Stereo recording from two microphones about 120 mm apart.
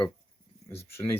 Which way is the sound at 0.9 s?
20° left (ahead or behind).